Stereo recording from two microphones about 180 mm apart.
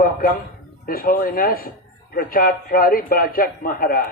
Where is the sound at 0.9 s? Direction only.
55° left (ahead or behind).